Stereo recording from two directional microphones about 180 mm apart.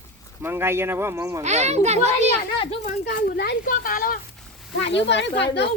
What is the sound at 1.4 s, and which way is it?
Speech, 40° right (ahead or behind).